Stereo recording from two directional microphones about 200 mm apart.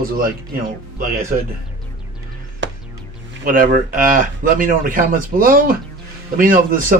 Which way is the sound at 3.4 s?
45° right (ahead or behind).